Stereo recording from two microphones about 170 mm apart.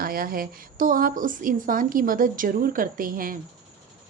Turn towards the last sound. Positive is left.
turn(degrees=-55)  # may be behind; listen again after turning